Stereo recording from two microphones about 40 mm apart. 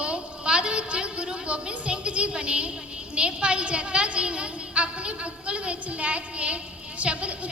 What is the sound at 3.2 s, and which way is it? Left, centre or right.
A woman's voice, right.